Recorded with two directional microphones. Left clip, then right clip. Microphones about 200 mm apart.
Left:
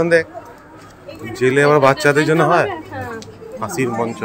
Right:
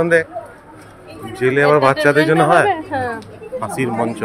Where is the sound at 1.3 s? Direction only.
10° left (ahead or behind).